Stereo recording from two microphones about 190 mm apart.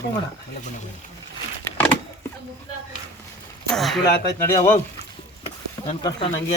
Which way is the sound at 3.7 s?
Centre (ahead or behind).